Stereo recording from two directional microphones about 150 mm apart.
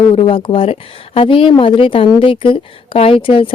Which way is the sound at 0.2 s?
35° left (ahead or behind).